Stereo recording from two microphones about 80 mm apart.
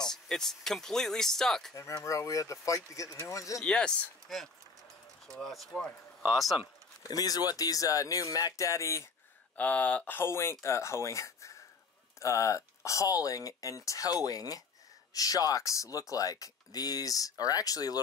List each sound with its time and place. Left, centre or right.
0.0 s speech: centre
2.0 s speech: left
3.6 s speech: centre
7.0 s speech: left
9.6 s speech: centre
10.1 s speech: left